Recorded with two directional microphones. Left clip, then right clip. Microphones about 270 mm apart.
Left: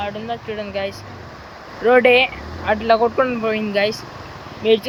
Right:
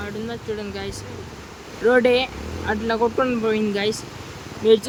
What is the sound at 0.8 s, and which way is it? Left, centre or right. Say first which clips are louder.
Speech: left 6 dB; centre.